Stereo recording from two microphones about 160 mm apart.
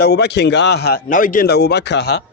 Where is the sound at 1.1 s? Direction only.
60° left (ahead or behind); by 2.1 s 90° left.